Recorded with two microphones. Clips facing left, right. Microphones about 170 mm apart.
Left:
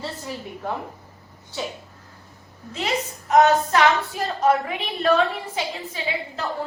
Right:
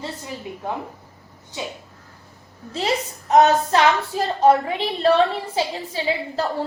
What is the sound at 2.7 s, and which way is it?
A woman's voice, 35° right (ahead or behind).